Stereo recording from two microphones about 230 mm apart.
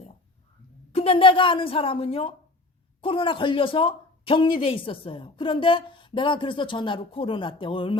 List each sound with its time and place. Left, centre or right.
0.9 s speech: left